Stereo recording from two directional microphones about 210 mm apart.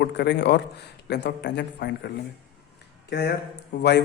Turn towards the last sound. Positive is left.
turn(degrees=55)  # may be behind; listen again after turning